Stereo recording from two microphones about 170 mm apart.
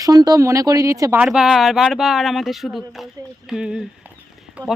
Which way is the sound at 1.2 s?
5° right (ahead or behind).